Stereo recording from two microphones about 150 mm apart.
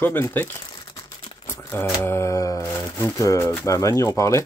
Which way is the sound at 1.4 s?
15° left (ahead or behind).